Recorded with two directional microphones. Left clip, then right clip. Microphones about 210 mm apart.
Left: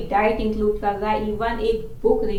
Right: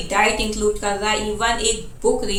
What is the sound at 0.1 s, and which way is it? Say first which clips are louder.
A woman's voice: right 2 dB; 10° right (ahead or behind).